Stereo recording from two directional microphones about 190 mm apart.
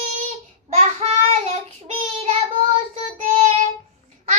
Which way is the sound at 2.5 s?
30° right (ahead or behind).